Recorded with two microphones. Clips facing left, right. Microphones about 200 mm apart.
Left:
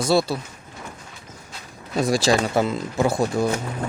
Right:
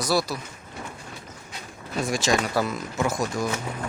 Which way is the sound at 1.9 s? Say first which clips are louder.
Left 5 dB; 35° left (ahead or behind).